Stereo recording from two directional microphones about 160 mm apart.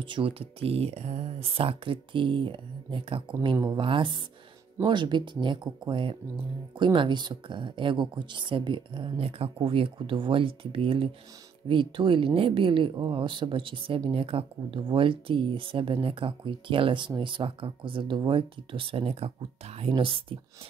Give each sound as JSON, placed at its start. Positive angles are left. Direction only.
{"t": 0.0, "sound": "speech", "side_deg": -30}